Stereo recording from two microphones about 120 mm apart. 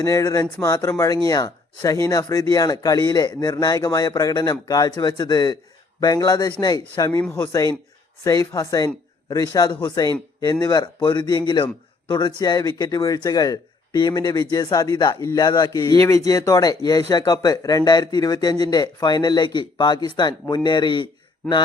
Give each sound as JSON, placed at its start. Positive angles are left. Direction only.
{"t": 0.0, "sound": "speech", "side_deg": 25}